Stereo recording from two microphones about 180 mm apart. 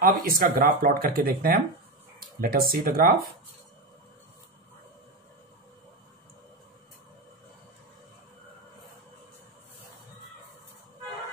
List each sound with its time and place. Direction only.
0.0 s speech: 55° right (ahead or behind)